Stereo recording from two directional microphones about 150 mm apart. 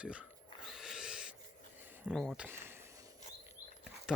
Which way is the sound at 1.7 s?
15° right (ahead or behind).